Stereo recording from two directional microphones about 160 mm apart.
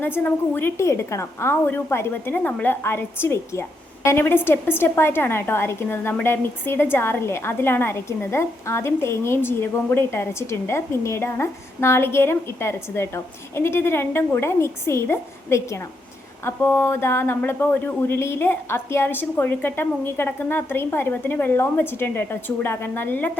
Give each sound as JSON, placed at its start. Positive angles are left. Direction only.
{"t": 0.0, "sound": "a woman's voice", "side_deg": 10}